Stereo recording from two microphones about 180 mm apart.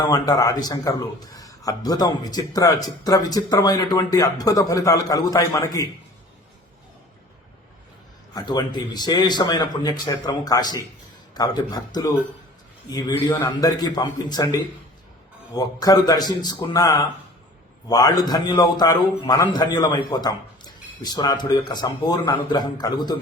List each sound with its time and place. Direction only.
0.0 s a man's voice: 20° left (ahead or behind)
8.3 s a man's voice: 20° left (ahead or behind)